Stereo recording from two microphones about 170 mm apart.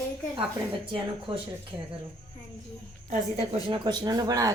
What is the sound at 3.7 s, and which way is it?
Speech, 25° right (ahead or behind).